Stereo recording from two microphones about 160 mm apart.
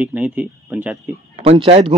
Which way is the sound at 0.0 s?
10° right (ahead or behind).